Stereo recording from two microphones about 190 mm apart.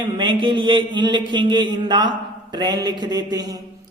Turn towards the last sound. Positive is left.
turn(degrees=-20)  # may be behind; listen again after turning